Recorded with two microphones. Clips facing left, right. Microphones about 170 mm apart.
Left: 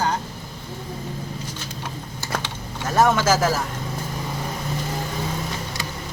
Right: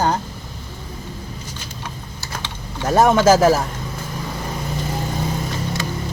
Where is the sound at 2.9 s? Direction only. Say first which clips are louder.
Right 5 dB; 25° right (ahead or behind).